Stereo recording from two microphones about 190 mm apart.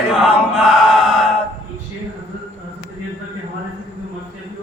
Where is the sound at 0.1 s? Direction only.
5° right (ahead or behind).